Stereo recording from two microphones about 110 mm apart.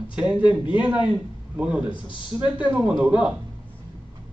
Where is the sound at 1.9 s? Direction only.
45° left (ahead or behind).